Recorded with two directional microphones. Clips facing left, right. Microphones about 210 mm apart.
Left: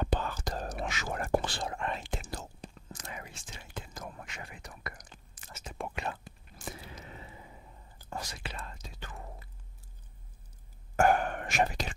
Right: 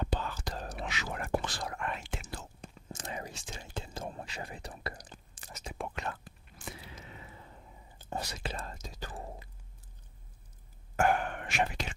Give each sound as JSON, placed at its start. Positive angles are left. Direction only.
{"t": 0.0, "sound": "whispering", "side_deg": 55}
{"t": 1.5, "sound": "whispering", "side_deg": 25}
{"t": 2.9, "sound": "whispering", "side_deg": -30}
{"t": 5.9, "sound": "whispering", "side_deg": 15}
{"t": 6.6, "sound": "whispering", "side_deg": 45}
{"t": 7.3, "sound": "a sound", "side_deg": 10}
{"t": 8.0, "sound": "whispering", "side_deg": -20}
{"t": 8.4, "sound": "whispering", "side_deg": -40}
{"t": 11.0, "sound": "whispering", "side_deg": 45}